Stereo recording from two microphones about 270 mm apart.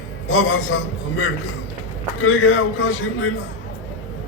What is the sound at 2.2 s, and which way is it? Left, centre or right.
A man's voice, left.